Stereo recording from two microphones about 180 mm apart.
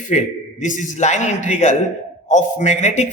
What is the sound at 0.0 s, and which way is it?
A man's voice, 40° left (ahead or behind).